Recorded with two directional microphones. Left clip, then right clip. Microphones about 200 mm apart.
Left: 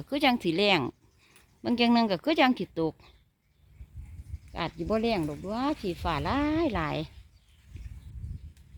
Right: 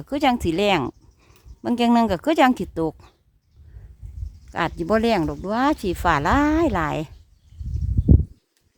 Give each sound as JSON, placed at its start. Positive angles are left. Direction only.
{"t": 0.0, "sound": "speech", "side_deg": -15}
{"t": 4.5, "sound": "speech", "side_deg": -30}